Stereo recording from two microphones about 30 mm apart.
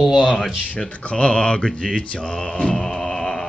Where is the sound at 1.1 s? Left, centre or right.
Left.